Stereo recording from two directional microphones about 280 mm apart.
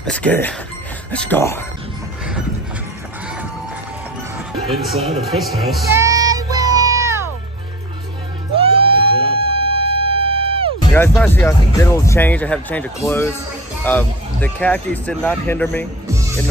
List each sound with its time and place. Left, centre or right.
0.0 s speech: centre
4.6 s a man's voice: centre
5.9 s music: centre
8.5 s music: centre
11.0 s speech: centre